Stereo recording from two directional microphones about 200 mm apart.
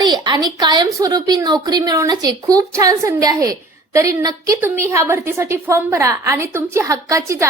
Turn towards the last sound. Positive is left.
turn(degrees=-15)  # may be behind; listen again after turning